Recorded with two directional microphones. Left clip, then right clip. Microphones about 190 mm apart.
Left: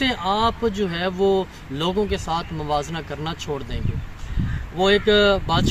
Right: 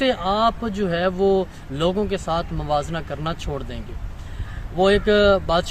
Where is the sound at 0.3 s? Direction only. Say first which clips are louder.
Even; 35° right (ahead or behind).